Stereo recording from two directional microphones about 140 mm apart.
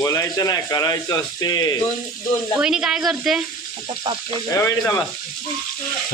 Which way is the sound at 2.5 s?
5° right (ahead or behind).